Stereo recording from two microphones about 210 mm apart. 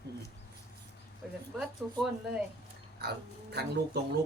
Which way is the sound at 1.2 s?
5° right (ahead or behind).